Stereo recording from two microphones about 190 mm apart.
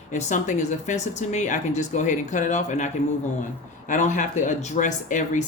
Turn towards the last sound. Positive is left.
turn(degrees=40)  # may be behind; listen again after turning